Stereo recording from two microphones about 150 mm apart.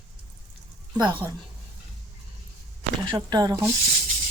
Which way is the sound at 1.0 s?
30° right (ahead or behind).